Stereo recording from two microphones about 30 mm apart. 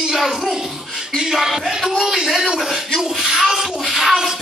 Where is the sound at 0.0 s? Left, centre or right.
Centre.